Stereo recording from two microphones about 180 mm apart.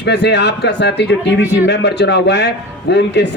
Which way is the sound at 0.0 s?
70° left (ahead or behind).